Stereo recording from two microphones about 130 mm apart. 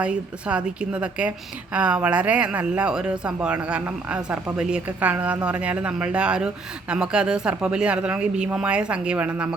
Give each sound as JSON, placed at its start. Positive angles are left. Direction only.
{"t": 0.0, "sound": "speech", "side_deg": -10}